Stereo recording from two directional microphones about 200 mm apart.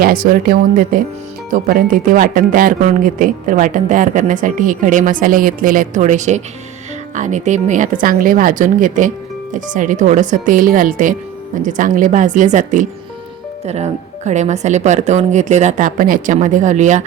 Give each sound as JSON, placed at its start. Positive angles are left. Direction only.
{"t": 0.0, "sound": "speech", "side_deg": -45}